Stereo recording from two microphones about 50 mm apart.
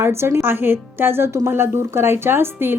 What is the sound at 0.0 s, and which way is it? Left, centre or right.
Speech, right.